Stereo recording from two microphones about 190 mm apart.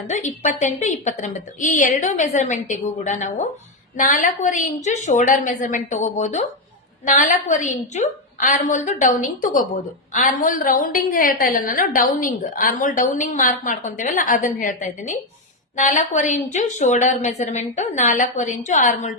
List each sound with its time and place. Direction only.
0.1 s a woman's voice: 40° left (ahead or behind)